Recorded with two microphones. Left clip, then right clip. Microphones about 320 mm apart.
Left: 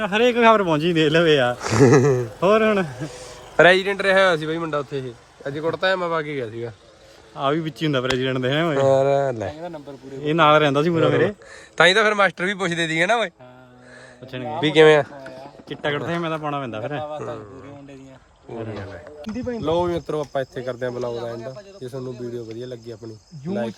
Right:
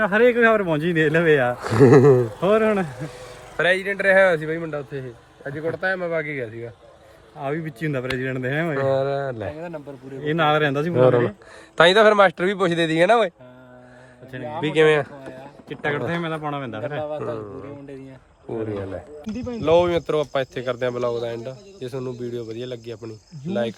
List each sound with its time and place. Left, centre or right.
0.0 s speech: centre
3.6 s a man's voice: left
3.8 s speech: centre
9.6 s speech: right
10.2 s speech: centre
11.8 s speech: centre
14.3 s speech: centre
19.4 s speech: centre